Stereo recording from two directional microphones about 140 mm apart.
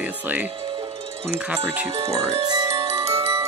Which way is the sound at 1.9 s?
45° right (ahead or behind).